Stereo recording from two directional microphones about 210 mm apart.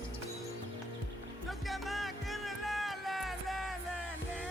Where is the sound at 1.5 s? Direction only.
Centre (ahead or behind).